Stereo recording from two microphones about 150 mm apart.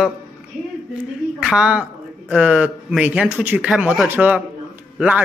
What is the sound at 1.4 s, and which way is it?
A man's voice, 5° right (ahead or behind).